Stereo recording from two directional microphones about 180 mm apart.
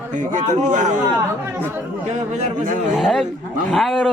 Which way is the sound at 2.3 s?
40° right (ahead or behind).